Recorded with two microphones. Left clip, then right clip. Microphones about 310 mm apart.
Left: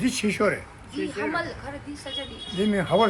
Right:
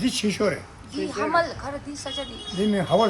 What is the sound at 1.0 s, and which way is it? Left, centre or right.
Speech, centre.